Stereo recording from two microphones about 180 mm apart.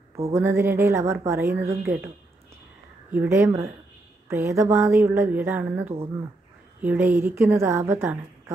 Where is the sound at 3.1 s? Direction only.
10° right (ahead or behind).